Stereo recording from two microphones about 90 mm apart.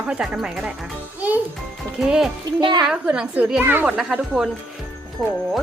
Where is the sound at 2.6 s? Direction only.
55° right (ahead or behind).